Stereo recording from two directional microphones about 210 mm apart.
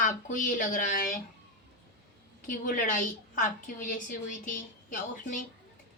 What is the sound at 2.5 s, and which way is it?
A woman's voice, 40° left (ahead or behind).